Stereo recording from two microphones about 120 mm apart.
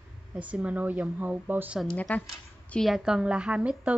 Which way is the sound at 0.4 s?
10° right (ahead or behind).